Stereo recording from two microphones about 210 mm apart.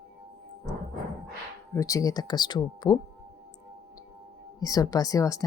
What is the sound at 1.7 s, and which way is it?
Speech, 15° left (ahead or behind).